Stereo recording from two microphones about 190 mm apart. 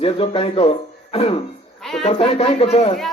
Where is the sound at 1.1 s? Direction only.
30° left (ahead or behind).